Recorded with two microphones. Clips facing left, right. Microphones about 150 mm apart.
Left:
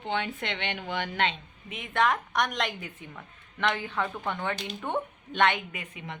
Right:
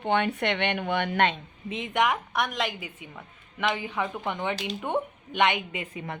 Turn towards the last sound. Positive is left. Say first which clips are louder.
# right 6 dB
turn(degrees=-25)  # may be behind; listen again after turning